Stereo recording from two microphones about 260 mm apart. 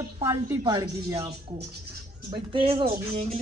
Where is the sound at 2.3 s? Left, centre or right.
Centre.